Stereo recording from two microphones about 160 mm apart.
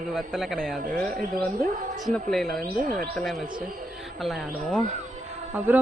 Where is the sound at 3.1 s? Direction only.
Centre (ahead or behind).